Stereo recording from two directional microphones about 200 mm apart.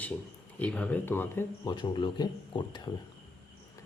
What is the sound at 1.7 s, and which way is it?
Speech, 25° left (ahead or behind).